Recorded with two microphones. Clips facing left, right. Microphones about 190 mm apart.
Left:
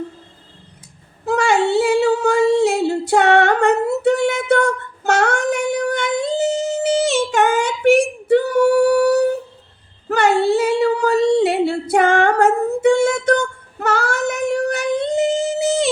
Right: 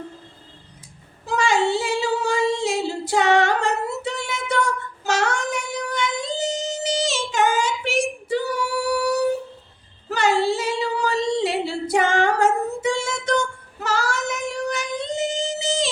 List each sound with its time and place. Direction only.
1.2 s female singing: 60° left (ahead or behind)